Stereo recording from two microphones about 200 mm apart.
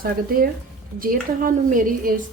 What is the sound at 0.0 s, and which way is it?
A woman's voice, 45° right (ahead or behind).